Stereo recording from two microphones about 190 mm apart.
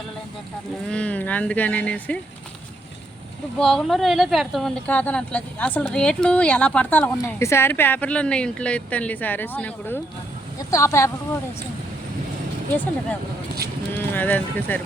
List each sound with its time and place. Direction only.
0.9 s a woman's voice: 5° left (ahead or behind)
3.6 s a woman's voice: 5° left (ahead or behind)
12.7 s a woman's voice: 10° left (ahead or behind)